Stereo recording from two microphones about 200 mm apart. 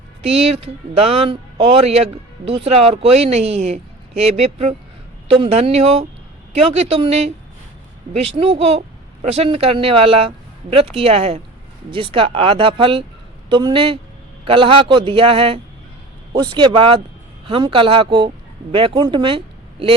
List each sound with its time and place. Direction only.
0.2 s speech: 30° right (ahead or behind)
8.4 s speech: 30° right (ahead or behind)